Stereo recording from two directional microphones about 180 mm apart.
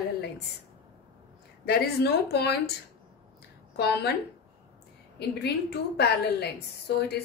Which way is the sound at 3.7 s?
65° left (ahead or behind).